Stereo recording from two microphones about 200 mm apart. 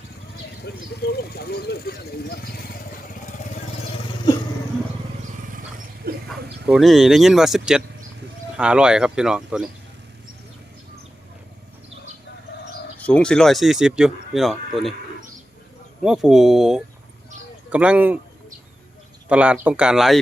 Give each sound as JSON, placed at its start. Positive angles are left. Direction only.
{"t": 0.6, "sound": "speech", "side_deg": 55}
{"t": 6.0, "sound": "livestock", "side_deg": -50}
{"t": 6.7, "sound": "speech", "side_deg": 0}
{"t": 13.0, "sound": "speech", "side_deg": 5}
{"t": 16.0, "sound": "speech", "side_deg": 0}
{"t": 19.3, "sound": "speech", "side_deg": -5}